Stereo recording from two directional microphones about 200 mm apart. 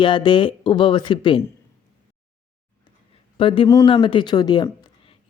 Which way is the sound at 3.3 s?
25° left (ahead or behind).